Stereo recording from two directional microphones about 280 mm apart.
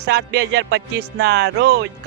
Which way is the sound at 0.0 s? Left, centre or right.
Right.